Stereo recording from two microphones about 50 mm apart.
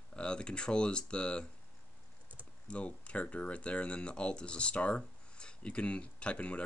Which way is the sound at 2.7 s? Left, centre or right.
Left.